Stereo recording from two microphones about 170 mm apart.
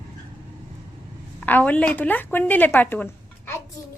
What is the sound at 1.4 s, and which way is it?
A woman's voice, 10° left (ahead or behind).